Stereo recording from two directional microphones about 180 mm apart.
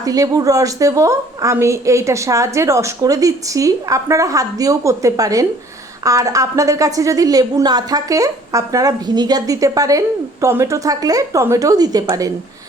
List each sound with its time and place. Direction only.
0.0 s a woman's voice: 20° right (ahead or behind)